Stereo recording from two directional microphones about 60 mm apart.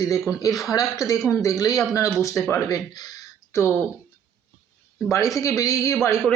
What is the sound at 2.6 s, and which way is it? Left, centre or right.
Speech, left.